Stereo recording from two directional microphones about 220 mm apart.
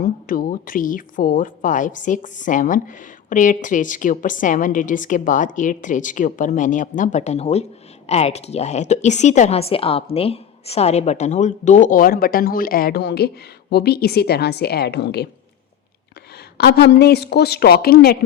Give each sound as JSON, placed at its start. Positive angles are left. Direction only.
{"t": 0.0, "sound": "a woman's voice", "side_deg": 40}
{"t": 16.6, "sound": "a woman's voice", "side_deg": 45}